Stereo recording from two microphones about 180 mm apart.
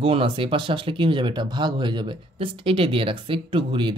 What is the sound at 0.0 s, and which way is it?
Speech, 30° right (ahead or behind).